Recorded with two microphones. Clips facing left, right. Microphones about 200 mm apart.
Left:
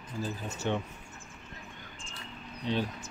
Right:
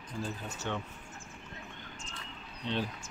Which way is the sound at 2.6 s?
10° left (ahead or behind).